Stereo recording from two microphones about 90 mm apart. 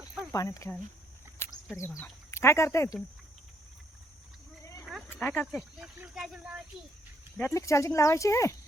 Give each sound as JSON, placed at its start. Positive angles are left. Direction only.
{"t": 0.3, "sound": "speech", "side_deg": 40}
{"t": 1.4, "sound": "a sound", "side_deg": 25}
{"t": 2.3, "sound": "speech", "side_deg": 30}
{"t": 5.0, "sound": "speech", "side_deg": 25}
{"t": 5.5, "sound": "speech", "side_deg": -5}
{"t": 7.4, "sound": "speech", "side_deg": 35}